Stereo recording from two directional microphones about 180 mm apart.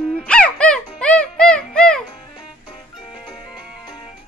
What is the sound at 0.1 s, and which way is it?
Music, 5° left (ahead or behind).